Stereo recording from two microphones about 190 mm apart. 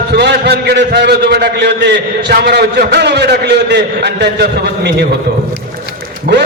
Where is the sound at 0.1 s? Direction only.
60° right (ahead or behind).